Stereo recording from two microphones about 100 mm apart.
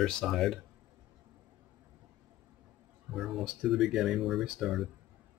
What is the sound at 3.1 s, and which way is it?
Speech, 5° right (ahead or behind).